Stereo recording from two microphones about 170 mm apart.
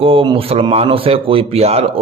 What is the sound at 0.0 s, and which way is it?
A man's voice, 30° right (ahead or behind).